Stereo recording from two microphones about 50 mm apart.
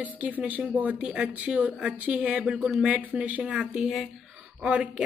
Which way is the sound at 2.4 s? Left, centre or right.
Centre.